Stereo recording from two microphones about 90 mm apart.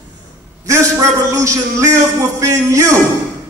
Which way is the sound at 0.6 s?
35° right (ahead or behind).